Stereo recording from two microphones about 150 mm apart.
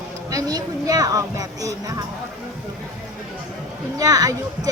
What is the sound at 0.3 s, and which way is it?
Speech, 25° right (ahead or behind).